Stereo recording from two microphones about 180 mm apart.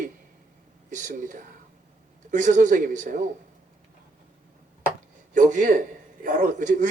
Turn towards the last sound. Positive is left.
turn(degrees=-45)  # may be behind; listen again after turning